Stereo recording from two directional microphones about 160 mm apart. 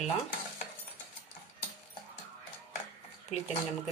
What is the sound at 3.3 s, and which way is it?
Speech, 45° left (ahead or behind).